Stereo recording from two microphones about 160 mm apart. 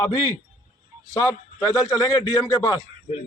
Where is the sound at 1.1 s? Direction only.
20° left (ahead or behind).